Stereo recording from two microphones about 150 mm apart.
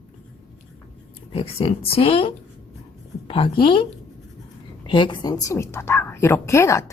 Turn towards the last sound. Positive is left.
turn(degrees=20)  # may be behind; listen again after turning